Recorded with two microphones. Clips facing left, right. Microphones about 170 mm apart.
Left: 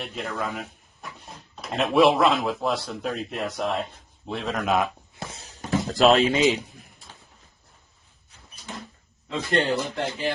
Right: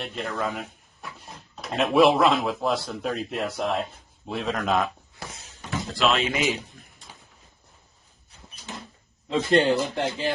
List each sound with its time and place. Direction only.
0.0 s speech: centre (ahead or behind)
5.3 s a sound: 35° left (ahead or behind)
6.4 s a man's voice: 15° left (ahead or behind)
9.3 s speech: 35° right (ahead or behind)